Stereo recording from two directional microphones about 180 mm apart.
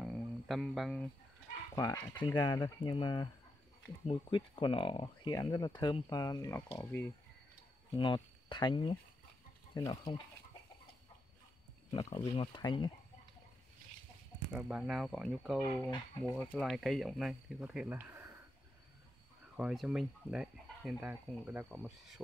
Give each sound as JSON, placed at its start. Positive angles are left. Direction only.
{"t": 0.0, "sound": "a sound", "side_deg": 0}
{"t": 1.8, "sound": "speech", "side_deg": 20}
{"t": 7.9, "sound": "speech", "side_deg": 25}
{"t": 11.9, "sound": "speech", "side_deg": 35}
{"t": 14.5, "sound": "speech", "side_deg": -5}
{"t": 19.5, "sound": "speech", "side_deg": 0}